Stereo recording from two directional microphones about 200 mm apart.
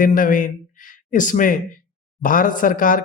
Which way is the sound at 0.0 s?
45° left (ahead or behind).